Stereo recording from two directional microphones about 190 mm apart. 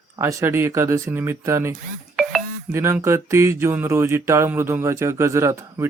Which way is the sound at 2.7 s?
15° right (ahead or behind).